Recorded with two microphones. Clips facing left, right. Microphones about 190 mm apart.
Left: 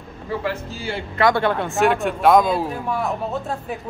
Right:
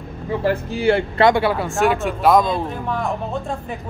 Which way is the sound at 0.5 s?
60° right (ahead or behind).